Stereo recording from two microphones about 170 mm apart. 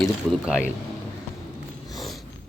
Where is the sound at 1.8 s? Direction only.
Centre (ahead or behind).